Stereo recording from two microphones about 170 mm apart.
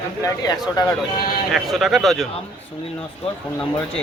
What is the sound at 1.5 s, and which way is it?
Speech, centre (ahead or behind).